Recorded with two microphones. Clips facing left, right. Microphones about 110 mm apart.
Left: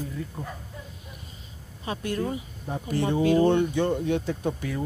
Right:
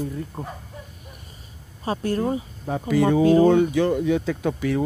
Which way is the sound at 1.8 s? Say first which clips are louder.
Right 5 dB; 35° right (ahead or behind).